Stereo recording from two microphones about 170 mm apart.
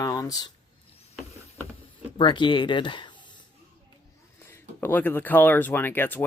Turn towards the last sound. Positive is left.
turn(degrees=10)  # may be behind; listen again after turning